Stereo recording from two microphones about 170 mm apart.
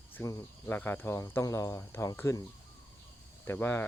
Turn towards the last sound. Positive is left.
turn(degrees=10)  # may be behind; listen again after turning